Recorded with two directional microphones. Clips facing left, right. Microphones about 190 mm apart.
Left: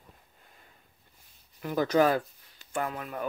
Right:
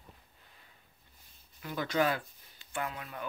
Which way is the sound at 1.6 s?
45° left (ahead or behind).